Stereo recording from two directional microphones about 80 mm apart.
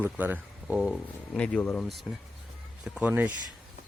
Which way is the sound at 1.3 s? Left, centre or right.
Centre.